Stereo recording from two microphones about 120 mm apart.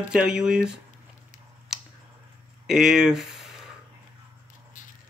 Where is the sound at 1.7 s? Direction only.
5° right (ahead or behind).